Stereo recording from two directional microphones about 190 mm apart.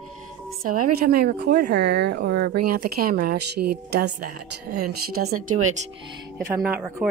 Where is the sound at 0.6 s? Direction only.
50° right (ahead or behind).